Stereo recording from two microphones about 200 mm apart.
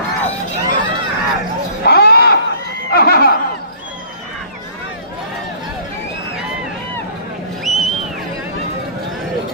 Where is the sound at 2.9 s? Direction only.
50° left (ahead or behind).